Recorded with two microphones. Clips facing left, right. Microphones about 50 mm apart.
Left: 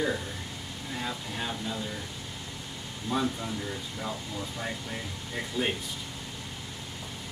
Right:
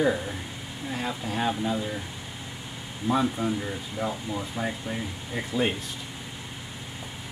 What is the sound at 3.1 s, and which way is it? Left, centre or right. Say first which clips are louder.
Speech: right 5 dB; right.